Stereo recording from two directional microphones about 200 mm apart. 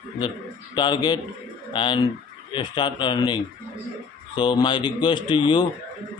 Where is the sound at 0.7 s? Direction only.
20° left (ahead or behind).